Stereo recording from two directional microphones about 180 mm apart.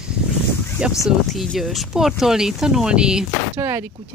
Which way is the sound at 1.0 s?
Centre (ahead or behind).